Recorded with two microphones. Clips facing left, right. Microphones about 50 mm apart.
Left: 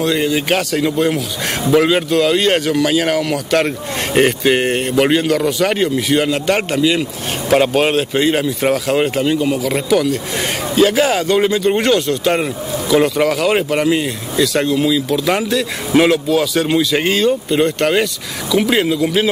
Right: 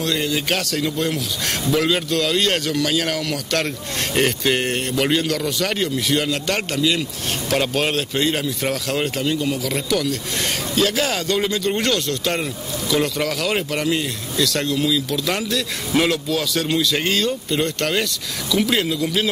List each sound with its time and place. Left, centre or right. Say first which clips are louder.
0.0 s speech: left 6 dB; centre